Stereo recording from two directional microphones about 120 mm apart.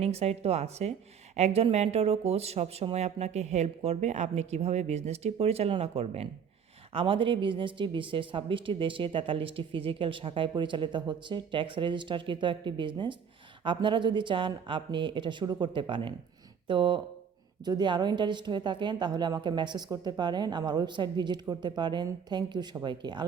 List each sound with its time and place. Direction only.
0.0 s a woman's voice: 60° right (ahead or behind); by 23.2 s 40° right (ahead or behind)